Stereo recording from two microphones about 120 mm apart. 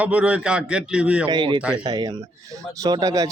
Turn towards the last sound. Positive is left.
turn(degrees=-30)  # may be behind; listen again after turning